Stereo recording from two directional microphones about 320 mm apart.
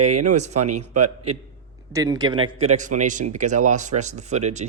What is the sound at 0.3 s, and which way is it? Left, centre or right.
Speech, right.